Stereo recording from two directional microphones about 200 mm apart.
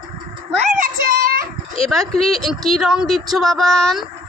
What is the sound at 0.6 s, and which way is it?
Child singing, 40° right (ahead or behind).